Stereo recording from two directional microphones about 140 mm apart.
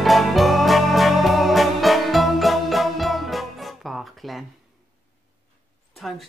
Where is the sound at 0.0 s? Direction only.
Centre (ahead or behind).